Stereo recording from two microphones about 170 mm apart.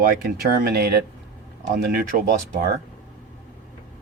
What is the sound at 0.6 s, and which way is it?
Speech, 65° right (ahead or behind).